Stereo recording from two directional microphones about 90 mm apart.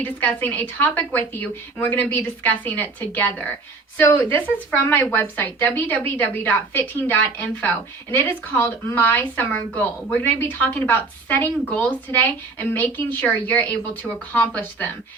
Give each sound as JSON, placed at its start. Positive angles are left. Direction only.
{"t": 0.0, "sound": "speech", "side_deg": 20}
{"t": 3.9, "sound": "speech", "side_deg": 30}